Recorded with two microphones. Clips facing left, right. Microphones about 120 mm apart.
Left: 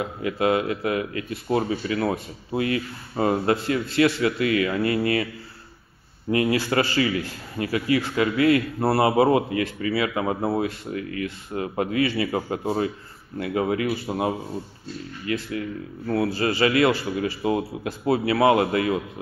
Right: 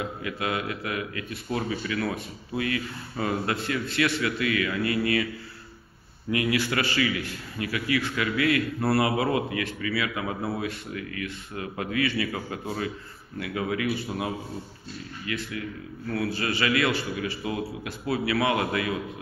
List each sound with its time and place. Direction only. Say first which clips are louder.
0.2 s a man's voice: left 11 dB; 30° left (ahead or behind)
6.3 s a man's voice: left 5 dB; 35° left (ahead or behind)